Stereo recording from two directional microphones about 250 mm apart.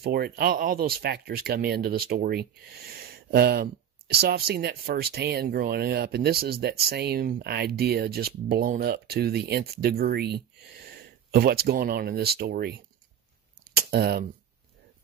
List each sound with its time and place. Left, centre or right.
0.0 s speech: right